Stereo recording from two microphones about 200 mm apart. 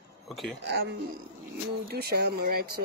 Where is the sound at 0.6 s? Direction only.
55° right (ahead or behind).